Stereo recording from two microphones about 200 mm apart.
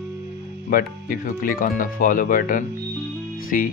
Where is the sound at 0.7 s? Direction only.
45° left (ahead or behind).